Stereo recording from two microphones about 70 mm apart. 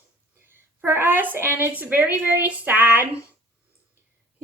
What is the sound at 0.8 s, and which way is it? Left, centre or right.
A child's voice, right.